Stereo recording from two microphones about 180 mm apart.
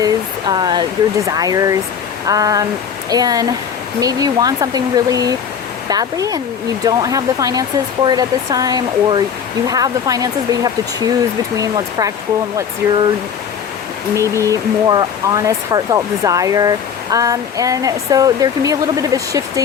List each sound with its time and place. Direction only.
0.0 s speech: 25° right (ahead or behind)
14.2 s speech: 15° right (ahead or behind)